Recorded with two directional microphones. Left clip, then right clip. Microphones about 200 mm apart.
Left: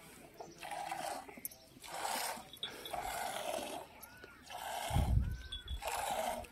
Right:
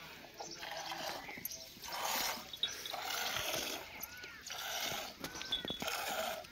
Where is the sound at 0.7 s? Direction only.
25° left (ahead or behind).